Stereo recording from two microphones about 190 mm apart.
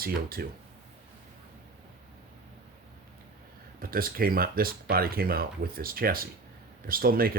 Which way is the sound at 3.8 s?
50° right (ahead or behind).